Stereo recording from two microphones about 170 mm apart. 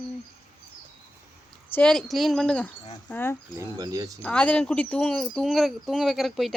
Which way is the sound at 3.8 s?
20° right (ahead or behind).